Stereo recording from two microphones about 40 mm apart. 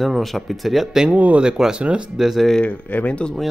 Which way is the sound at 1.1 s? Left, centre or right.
Right.